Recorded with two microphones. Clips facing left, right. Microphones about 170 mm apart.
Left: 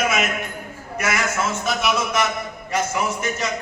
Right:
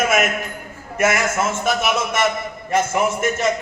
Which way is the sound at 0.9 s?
50° right (ahead or behind).